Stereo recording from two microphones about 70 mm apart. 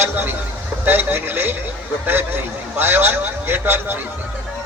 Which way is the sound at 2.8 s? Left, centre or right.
Right.